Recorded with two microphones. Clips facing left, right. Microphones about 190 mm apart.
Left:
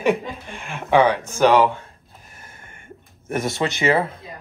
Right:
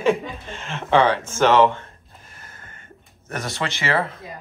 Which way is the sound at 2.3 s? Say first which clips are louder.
Even; 10° left (ahead or behind).